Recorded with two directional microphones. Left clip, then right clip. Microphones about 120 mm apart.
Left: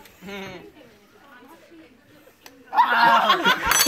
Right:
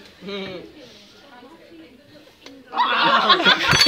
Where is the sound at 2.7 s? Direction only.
35° left (ahead or behind).